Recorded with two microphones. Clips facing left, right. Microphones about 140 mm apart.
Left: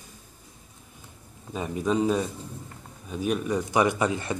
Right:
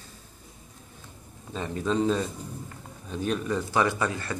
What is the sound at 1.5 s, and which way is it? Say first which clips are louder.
A man's voice: left 2 dB; 10° left (ahead or behind).